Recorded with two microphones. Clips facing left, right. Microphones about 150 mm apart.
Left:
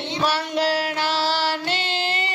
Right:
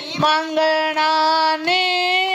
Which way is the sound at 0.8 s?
60° right (ahead or behind).